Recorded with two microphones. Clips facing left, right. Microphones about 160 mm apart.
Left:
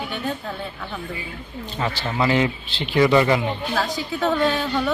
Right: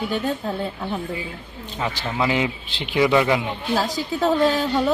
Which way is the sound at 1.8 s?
5° right (ahead or behind).